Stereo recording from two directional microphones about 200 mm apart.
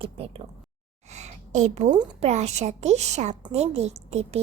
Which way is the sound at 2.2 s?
35° right (ahead or behind).